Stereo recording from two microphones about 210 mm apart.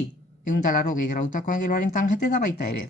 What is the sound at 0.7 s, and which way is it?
Speech, 35° left (ahead or behind).